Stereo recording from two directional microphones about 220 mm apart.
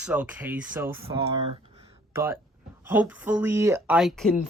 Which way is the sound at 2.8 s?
10° right (ahead or behind).